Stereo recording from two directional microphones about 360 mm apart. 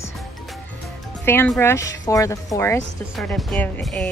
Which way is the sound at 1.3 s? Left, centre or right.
Centre.